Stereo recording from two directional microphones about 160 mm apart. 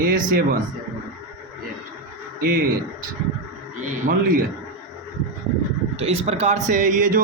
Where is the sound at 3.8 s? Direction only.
55° right (ahead or behind).